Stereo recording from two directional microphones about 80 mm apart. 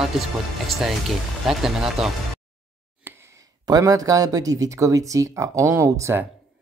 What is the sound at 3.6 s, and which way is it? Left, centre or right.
Speech, right.